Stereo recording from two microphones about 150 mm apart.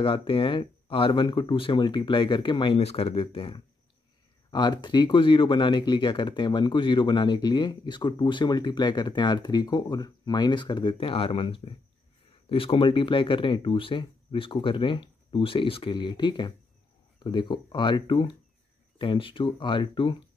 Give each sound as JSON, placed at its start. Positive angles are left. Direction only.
{"t": 0.0, "sound": "speech", "side_deg": 35}